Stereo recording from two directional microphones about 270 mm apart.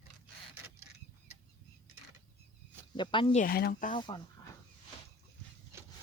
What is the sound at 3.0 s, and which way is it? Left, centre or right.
Speech, centre.